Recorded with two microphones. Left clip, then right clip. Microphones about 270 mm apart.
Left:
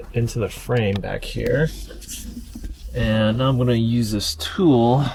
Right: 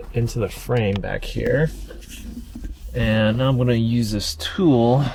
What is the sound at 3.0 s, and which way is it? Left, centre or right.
Speech, centre.